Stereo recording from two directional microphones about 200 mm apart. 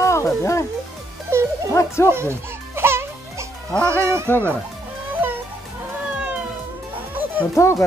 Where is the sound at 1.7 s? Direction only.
15° left (ahead or behind).